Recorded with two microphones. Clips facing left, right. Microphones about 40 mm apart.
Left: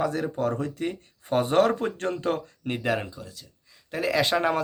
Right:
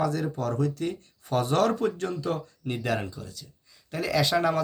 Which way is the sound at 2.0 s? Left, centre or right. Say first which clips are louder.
Left 2 dB; left.